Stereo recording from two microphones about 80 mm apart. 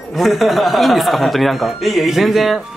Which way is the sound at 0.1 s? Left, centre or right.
Centre.